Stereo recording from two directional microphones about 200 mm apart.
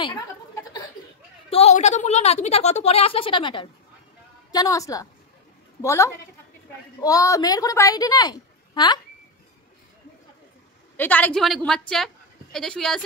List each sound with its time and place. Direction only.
1.5 s a woman's voice: 30° left (ahead or behind)
11.0 s a woman's voice: 10° left (ahead or behind)